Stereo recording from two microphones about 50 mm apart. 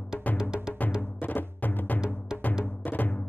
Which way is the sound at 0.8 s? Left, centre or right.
Left.